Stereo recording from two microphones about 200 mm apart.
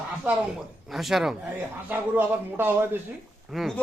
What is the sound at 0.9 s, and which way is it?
Speech, centre (ahead or behind).